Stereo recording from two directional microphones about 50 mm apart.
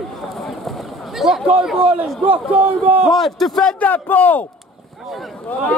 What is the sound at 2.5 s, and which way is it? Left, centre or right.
Speech, right.